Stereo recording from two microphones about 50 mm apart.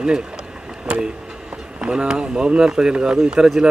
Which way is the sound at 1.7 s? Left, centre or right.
Centre.